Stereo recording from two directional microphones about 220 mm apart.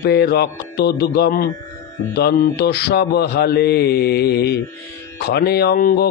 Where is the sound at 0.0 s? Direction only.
45° left (ahead or behind).